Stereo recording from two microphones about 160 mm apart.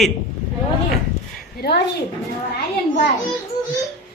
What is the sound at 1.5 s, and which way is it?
Speech, 90° left.